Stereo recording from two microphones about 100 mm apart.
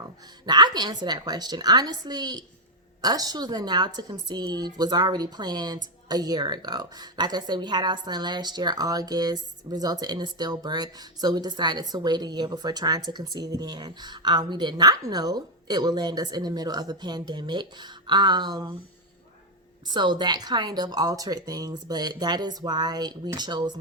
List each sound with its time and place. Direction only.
0.4 s a woman's voice: 45° right (ahead or behind)
19.9 s a woman's voice: 50° right (ahead or behind)